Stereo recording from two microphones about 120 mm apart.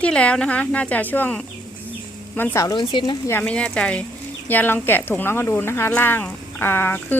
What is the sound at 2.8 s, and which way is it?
Speech, 40° left (ahead or behind).